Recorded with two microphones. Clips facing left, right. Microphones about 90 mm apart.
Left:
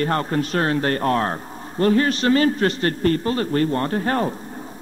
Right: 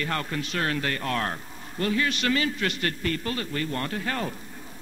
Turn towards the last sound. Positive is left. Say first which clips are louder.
# left 9 dB
turn(degrees=35)  # may be behind; listen again after turning